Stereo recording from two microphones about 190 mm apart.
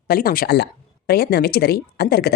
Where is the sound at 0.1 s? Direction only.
50° left (ahead or behind).